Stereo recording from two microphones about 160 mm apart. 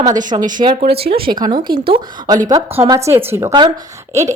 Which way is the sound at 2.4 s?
20° right (ahead or behind).